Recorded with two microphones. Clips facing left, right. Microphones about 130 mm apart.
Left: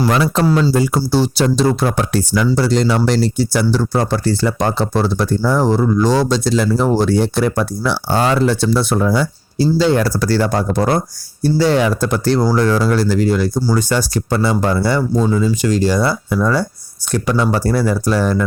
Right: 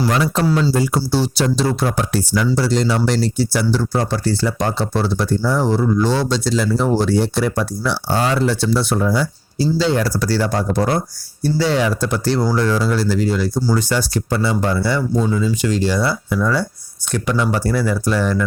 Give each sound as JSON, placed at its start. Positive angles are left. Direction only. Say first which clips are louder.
{"t": 0.1, "sound": "speech", "louder": "left 3 dB", "side_deg": 80}
{"t": 0.7, "sound": "speech", "louder": "left 3 dB", "side_deg": 60}
{"t": 2.6, "sound": "speech", "louder": "left 3 dB", "side_deg": 60}
{"t": 3.5, "sound": "speech", "louder": "left 2 dB", "side_deg": 50}